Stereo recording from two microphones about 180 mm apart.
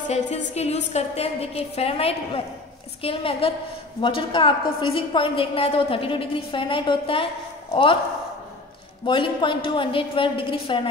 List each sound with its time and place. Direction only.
0.1 s a woman's voice: 35° left (ahead or behind)
9.0 s a woman's voice: 25° left (ahead or behind)